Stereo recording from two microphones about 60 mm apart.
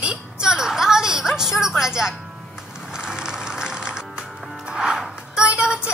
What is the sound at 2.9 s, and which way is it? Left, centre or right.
Music, centre.